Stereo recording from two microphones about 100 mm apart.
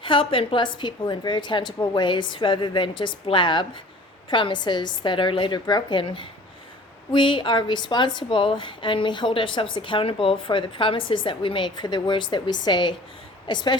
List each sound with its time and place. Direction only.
0.0 s a woman's voice: 60° left (ahead or behind)